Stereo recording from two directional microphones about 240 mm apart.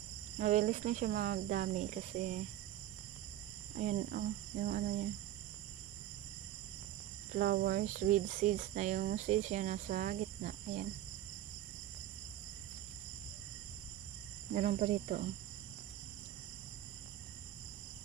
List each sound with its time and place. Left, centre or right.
0.4 s speech: right
3.7 s speech: right
7.3 s speech: right
14.5 s speech: right